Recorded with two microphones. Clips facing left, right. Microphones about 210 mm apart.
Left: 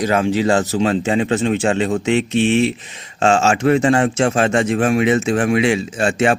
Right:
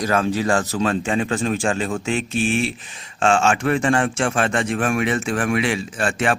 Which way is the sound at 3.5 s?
25° left (ahead or behind).